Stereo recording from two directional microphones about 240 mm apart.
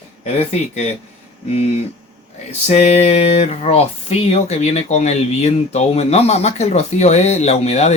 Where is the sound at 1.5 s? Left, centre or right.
Left.